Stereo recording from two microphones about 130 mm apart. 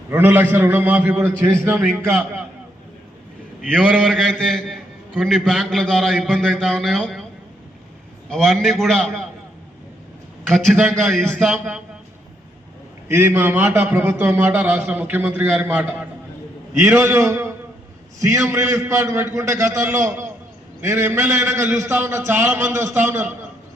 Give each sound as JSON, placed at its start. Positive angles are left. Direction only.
{"t": 0.1, "sound": "a man's voice", "side_deg": -15}
{"t": 3.6, "sound": "a man's voice", "side_deg": 5}
{"t": 8.3, "sound": "a man's voice", "side_deg": 5}
{"t": 11.1, "sound": "a man's voice", "side_deg": 5}
{"t": 13.1, "sound": "a man's voice", "side_deg": -15}